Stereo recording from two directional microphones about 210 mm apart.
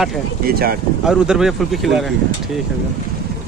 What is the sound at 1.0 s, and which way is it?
Speech, 5° right (ahead or behind).